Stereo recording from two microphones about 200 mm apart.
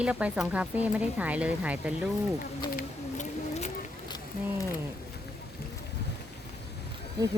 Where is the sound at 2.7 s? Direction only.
40° left (ahead or behind).